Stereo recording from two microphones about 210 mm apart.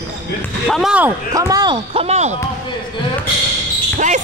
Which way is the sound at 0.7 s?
Centre (ahead or behind).